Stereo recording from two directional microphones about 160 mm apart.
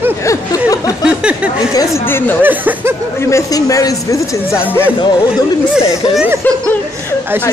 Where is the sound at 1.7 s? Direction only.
15° left (ahead or behind).